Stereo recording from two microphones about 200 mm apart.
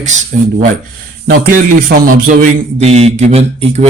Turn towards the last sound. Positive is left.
turn(degrees=-35)  # may be behind; listen again after turning